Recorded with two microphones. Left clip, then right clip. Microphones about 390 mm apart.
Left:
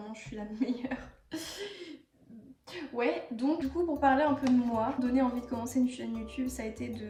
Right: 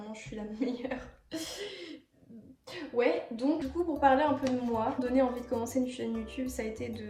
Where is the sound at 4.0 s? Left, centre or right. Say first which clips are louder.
Right 2 dB; centre.